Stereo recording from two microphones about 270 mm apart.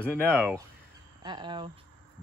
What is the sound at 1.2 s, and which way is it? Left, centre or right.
Speech, centre.